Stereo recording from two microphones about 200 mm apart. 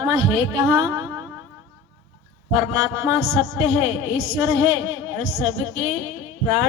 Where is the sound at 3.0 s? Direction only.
5° right (ahead or behind).